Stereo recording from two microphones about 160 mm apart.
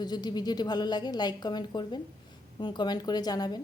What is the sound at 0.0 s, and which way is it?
A woman's voice, 25° left (ahead or behind).